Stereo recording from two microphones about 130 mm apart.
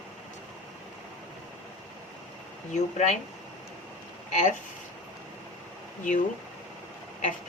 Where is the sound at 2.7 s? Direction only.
65° left (ahead or behind).